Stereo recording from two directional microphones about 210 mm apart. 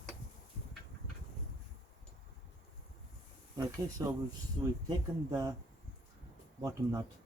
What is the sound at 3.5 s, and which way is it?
Speech, 15° right (ahead or behind).